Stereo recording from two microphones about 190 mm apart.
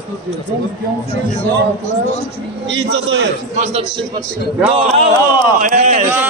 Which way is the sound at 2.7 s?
80° right.